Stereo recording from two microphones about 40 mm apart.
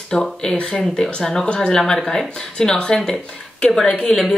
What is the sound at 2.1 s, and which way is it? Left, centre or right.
Speech, centre.